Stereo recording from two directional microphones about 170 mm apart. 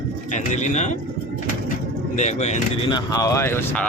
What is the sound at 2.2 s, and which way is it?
Speech, 45° left (ahead or behind).